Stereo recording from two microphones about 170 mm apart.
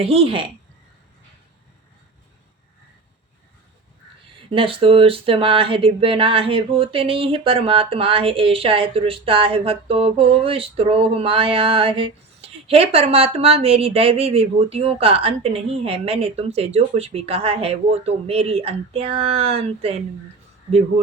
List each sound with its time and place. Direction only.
0.0 s speech: 35° right (ahead or behind)
4.5 s speech: 30° right (ahead or behind)